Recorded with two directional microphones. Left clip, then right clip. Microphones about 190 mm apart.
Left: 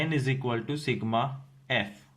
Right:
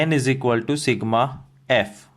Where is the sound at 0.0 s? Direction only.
45° right (ahead or behind).